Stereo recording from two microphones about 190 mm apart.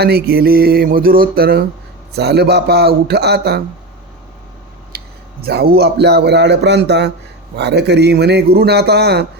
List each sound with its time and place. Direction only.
0.0 s a sound: 55° right (ahead or behind)
2.1 s a man's voice: 60° right (ahead or behind)
4.9 s a man's voice: 55° right (ahead or behind)